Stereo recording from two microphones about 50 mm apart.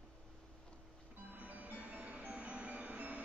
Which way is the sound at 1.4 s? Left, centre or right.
Right.